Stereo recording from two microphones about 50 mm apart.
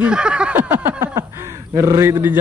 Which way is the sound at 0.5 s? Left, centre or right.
Right.